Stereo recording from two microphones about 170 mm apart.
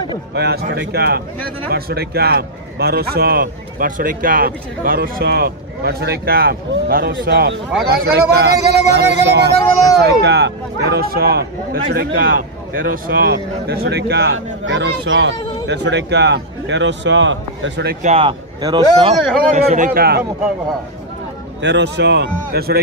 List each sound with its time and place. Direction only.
0.3 s a man's voice: 75° right (ahead or behind); by 7.6 s 90° right
7.9 s speech: 65° right (ahead or behind); by 17.9 s 90° right
18.0 s speech: 35° right (ahead or behind)
18.6 s speech: 25° right (ahead or behind)
19.5 s a man's voice: 50° right (ahead or behind); by 20.2 s 65° right (ahead or behind)
21.5 s a man's voice: 90° right; by 22.8 s 70° right (ahead or behind)